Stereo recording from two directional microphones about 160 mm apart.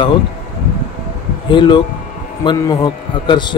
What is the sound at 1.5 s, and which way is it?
Speech, 30° left (ahead or behind).